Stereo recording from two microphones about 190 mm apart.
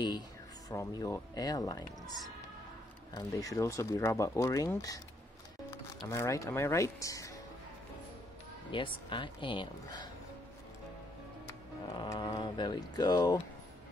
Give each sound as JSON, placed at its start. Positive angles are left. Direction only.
{"t": 0.7, "sound": "speech", "side_deg": 20}
{"t": 6.0, "sound": "speech", "side_deg": 15}
{"t": 8.7, "sound": "speech", "side_deg": 25}
{"t": 12.1, "sound": "speech", "side_deg": 25}